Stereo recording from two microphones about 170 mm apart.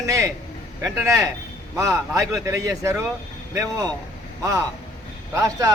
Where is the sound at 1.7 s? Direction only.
15° right (ahead or behind).